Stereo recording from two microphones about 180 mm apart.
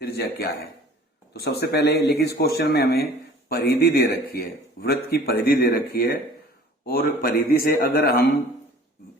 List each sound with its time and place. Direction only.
0.0 s a man's voice: 60° left (ahead or behind)